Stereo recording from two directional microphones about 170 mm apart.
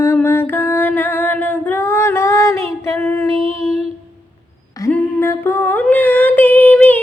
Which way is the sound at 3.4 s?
35° right (ahead or behind).